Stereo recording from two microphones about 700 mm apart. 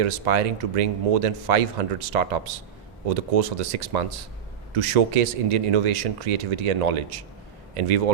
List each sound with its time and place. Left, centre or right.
0.0 s speech: right